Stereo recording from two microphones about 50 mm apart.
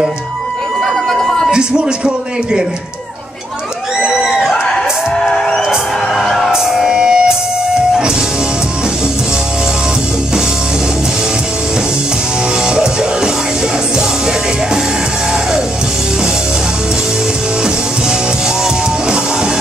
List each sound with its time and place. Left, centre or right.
1.0 s a sound: centre
1.5 s speech: centre
5.1 s music: centre
6.5 s music: centre
12.6 s music: centre